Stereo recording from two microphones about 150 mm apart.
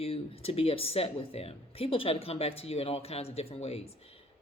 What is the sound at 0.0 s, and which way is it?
Speech, 40° left (ahead or behind).